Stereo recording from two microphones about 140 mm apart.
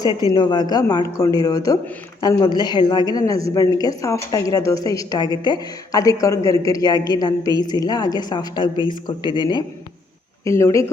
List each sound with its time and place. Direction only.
0.3 s a woman's voice: 30° left (ahead or behind)
10.4 s a woman's voice: 20° left (ahead or behind)